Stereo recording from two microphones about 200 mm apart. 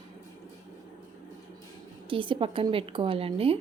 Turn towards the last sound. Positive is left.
turn(degrees=-30)  # may be behind; listen again after turning